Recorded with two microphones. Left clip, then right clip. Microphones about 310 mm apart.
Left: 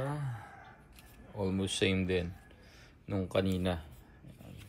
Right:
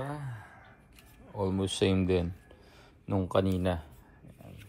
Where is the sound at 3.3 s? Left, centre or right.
Centre.